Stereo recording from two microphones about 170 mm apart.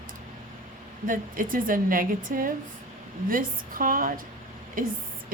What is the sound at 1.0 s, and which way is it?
A woman's voice, 55° right (ahead or behind).